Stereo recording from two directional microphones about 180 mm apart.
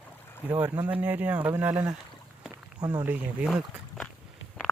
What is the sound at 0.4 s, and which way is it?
Speech, 10° right (ahead or behind).